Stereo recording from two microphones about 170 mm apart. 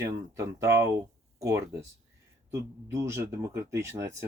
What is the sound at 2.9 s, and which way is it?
Speech, 15° right (ahead or behind).